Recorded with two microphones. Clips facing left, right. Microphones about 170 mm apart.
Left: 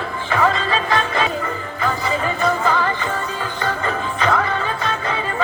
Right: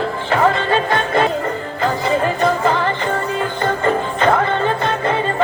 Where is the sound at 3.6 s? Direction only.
50° right (ahead or behind).